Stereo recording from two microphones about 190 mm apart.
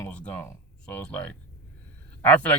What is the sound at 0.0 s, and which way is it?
A man's voice, 10° left (ahead or behind).